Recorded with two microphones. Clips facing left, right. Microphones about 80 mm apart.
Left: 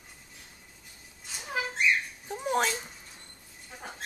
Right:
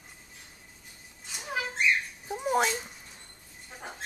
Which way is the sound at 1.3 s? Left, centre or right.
Centre.